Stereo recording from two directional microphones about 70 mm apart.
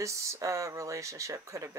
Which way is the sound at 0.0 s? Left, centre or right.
Right.